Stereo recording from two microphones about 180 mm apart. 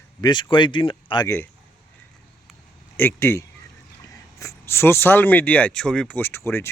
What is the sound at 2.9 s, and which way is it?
Speech, 15° left (ahead or behind).